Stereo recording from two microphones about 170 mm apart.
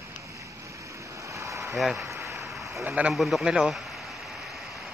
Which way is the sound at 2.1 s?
15° right (ahead or behind).